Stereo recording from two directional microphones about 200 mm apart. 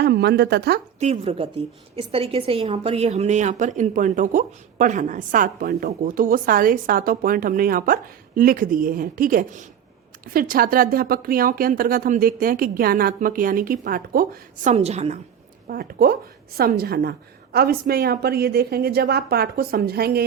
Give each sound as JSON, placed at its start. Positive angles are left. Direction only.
{"t": 0.0, "sound": "a woman's voice", "side_deg": -55}
{"t": 0.9, "sound": "a woman's voice", "side_deg": -35}
{"t": 15.6, "sound": "speech", "side_deg": -45}